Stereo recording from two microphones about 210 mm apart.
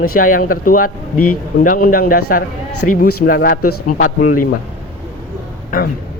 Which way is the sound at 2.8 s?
55° left (ahead or behind).